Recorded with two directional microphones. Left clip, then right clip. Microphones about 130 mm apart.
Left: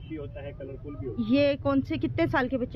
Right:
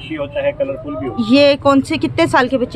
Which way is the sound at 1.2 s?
15° right (ahead or behind).